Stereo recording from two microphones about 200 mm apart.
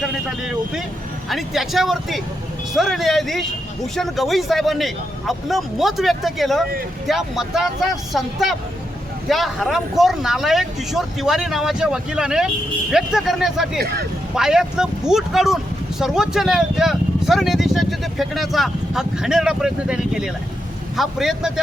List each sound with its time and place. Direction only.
0.0 s speech: 5° right (ahead or behind)
13.7 s speech: 50° right (ahead or behind)
14.3 s speech: 5° right (ahead or behind)